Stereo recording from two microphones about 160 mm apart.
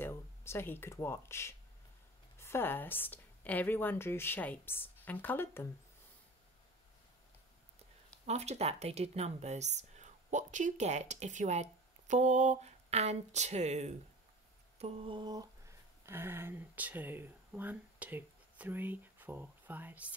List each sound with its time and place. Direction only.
0.0 s a woman's voice: 15° left (ahead or behind)
8.3 s speech: 45° right (ahead or behind)
14.8 s mantra: 40° right (ahead or behind)
16.1 s speech: 15° right (ahead or behind)